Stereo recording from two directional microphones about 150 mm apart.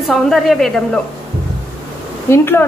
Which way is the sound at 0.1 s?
Centre (ahead or behind).